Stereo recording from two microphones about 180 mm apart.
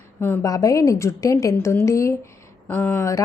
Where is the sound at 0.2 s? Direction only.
15° left (ahead or behind).